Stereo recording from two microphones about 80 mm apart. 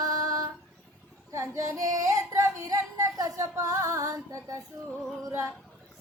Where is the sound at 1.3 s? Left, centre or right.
Right.